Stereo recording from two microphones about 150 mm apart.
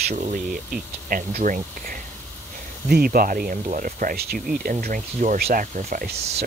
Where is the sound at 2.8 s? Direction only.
80° right.